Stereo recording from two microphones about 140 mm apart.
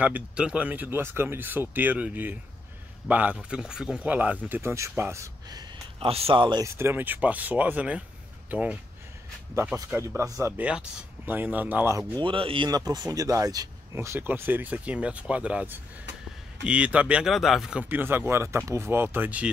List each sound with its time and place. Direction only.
0.0 s speech: 10° right (ahead or behind); by 5.7 s 25° right (ahead or behind)
5.9 s speech: 45° right (ahead or behind)
6.8 s speech: 15° right (ahead or behind)
9.8 s speech: 15° right (ahead or behind)
10.6 s speech: 10° right (ahead or behind)
12.2 s speech: 40° right (ahead or behind)
12.6 s speech: 25° right (ahead or behind); by 19.5 s 10° right (ahead or behind)